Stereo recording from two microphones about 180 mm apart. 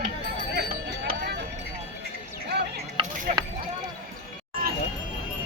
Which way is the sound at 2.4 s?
65° right (ahead or behind).